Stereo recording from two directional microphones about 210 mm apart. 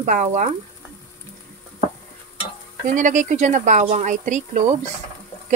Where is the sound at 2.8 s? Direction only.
35° right (ahead or behind).